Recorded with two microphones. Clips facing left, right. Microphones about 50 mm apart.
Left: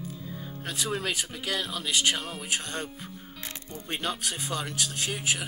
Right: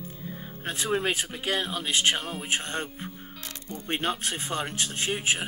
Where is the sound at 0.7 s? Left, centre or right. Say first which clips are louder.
Right 4 dB; right.